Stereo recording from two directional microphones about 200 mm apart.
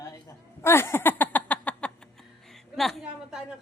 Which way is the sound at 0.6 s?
10° left (ahead or behind).